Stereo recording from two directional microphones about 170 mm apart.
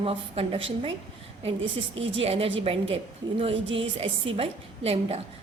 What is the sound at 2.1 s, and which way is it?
Speech, 35° right (ahead or behind).